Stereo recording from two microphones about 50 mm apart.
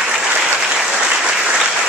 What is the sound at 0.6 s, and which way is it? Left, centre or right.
Applause, centre.